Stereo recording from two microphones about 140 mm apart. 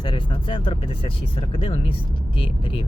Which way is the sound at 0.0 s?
35° left (ahead or behind).